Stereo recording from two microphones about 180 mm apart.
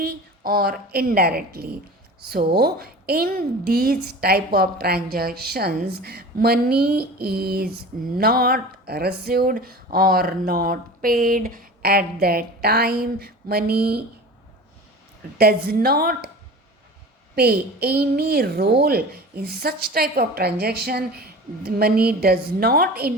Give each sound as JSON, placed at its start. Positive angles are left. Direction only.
{"t": 0.0, "sound": "a woman's voice", "side_deg": -60}
{"t": 15.4, "sound": "a woman's voice", "side_deg": -60}
{"t": 17.3, "sound": "a woman's voice", "side_deg": -60}